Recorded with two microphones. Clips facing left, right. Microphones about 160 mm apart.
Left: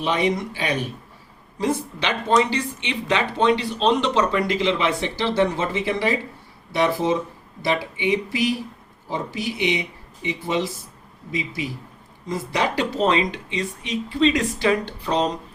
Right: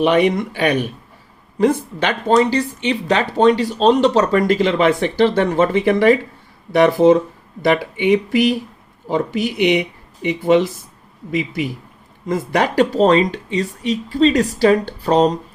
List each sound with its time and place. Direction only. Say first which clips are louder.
0.0 s speech: right 7 dB; 65° right (ahead or behind)
1.5 s speech: right 7 dB; 55° right (ahead or behind)
2.3 s speech: right 5 dB; 40° right (ahead or behind)